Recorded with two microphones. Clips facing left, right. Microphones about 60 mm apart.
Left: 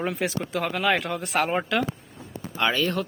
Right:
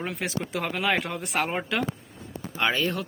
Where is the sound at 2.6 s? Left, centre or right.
Centre.